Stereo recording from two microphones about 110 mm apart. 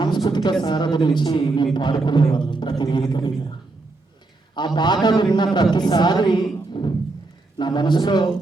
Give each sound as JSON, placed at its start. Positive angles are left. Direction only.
{"t": 0.0, "sound": "a sound", "side_deg": 45}
{"t": 0.6, "sound": "a man's voice", "side_deg": 45}
{"t": 4.5, "sound": "a man's voice", "side_deg": 45}